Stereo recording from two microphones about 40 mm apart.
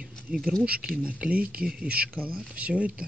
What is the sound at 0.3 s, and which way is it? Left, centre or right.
Speech, centre.